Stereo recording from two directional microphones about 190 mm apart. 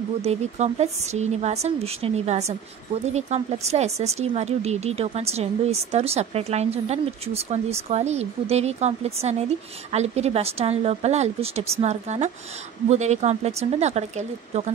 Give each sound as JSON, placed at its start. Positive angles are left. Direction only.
{"t": 0.2, "sound": "speech", "side_deg": -35}